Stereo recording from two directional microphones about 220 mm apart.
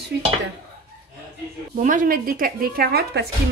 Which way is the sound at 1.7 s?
35° right (ahead or behind).